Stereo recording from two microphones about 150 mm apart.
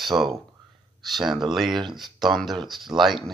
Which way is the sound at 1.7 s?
30° right (ahead or behind).